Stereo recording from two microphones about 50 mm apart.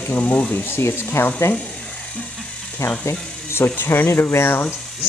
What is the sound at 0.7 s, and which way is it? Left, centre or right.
Speech, left.